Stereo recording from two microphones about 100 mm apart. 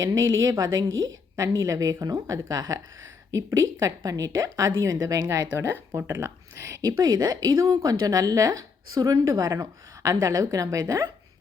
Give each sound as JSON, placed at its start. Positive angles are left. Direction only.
{"t": 0.0, "sound": "a woman's voice", "side_deg": -35}